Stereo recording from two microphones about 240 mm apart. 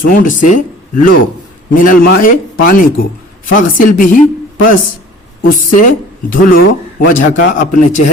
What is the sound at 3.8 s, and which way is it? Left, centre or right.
Speech, left.